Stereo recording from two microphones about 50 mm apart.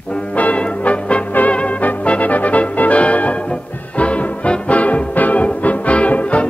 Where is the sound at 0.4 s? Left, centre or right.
Left.